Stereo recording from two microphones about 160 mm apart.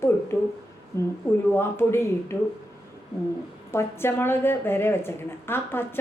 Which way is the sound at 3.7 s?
15° left (ahead or behind).